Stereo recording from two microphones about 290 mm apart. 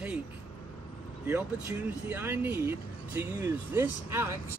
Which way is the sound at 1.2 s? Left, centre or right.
Centre.